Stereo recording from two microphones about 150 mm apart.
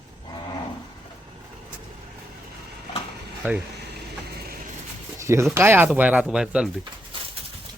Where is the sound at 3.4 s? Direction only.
15° right (ahead or behind).